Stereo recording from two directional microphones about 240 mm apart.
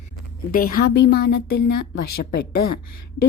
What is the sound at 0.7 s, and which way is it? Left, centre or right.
A woman's voice, left.